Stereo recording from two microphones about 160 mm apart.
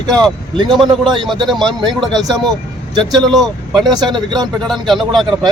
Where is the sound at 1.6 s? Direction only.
30° right (ahead or behind).